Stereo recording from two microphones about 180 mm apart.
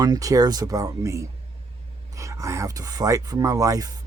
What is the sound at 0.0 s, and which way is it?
Speech, 20° right (ahead or behind).